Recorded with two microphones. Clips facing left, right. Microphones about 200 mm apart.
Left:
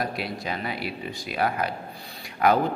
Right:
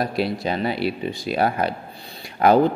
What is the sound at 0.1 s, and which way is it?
Speech, 30° right (ahead or behind).